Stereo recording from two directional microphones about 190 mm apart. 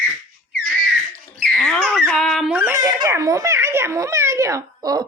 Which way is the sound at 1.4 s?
5° left (ahead or behind).